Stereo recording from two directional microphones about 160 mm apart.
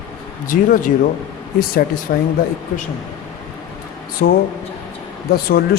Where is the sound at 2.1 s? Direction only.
70° left (ahead or behind).